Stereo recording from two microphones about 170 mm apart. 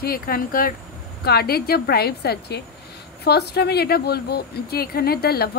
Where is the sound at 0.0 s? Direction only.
60° left (ahead or behind).